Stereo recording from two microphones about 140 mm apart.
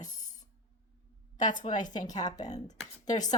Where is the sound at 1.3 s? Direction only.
60° left (ahead or behind).